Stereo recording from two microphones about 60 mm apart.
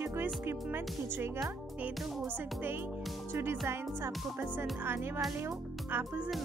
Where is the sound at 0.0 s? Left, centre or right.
Right.